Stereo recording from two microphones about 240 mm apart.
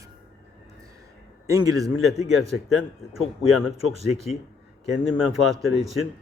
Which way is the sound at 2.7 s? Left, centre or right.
Centre.